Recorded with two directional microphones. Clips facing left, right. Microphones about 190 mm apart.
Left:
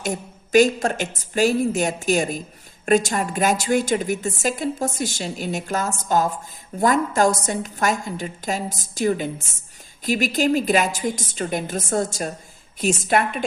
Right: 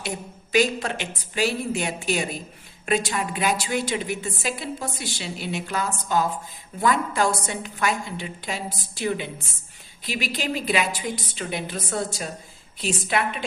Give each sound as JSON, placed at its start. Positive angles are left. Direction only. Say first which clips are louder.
{"t": 0.0, "sound": "a woman's voice", "louder": "left 5 dB", "side_deg": 45}